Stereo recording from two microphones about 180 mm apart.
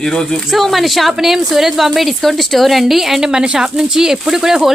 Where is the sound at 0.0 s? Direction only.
5° left (ahead or behind).